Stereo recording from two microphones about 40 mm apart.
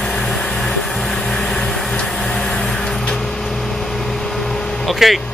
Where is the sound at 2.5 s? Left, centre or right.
Centre.